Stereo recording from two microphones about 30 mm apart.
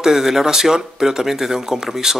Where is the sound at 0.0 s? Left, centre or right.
Centre.